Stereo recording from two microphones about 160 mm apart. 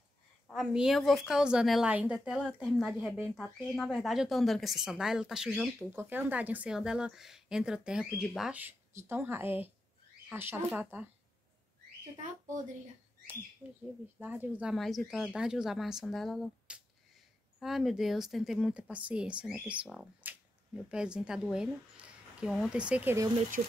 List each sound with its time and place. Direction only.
0.5 s speech: centre (ahead or behind)
12.2 s speech: 55° right (ahead or behind)
13.6 s speech: 10° left (ahead or behind)
14.2 s speech: 10° right (ahead or behind)